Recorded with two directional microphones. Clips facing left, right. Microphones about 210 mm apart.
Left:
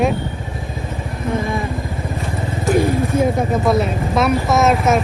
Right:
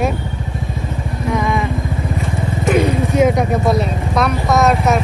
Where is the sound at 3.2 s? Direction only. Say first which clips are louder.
Right 5 dB; 90° right.